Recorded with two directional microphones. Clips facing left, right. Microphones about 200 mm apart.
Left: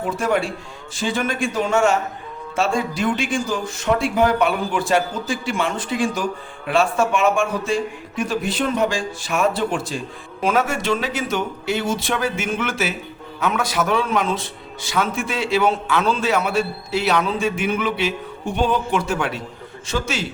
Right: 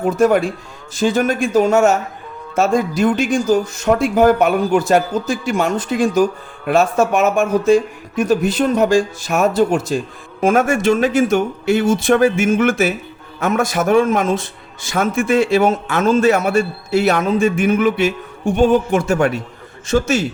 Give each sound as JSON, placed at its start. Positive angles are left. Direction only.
{"t": 0.0, "sound": "a man's voice", "side_deg": -45}